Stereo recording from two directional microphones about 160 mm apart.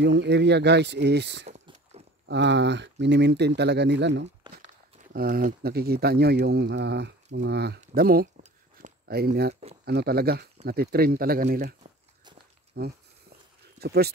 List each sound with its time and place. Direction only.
0.0 s speech: 90° right
5.1 s speech: 60° right (ahead or behind)
5.6 s speech: 75° right (ahead or behind); by 7.8 s 90° right
7.9 s speech: 70° right (ahead or behind)
9.0 s speech: 80° right; by 11.7 s 65° right (ahead or behind)
12.7 s speech: 80° right